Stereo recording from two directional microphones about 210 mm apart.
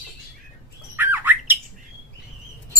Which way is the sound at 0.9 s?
10° right (ahead or behind).